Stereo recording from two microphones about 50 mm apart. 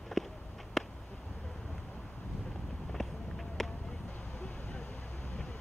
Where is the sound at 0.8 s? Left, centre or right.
Centre.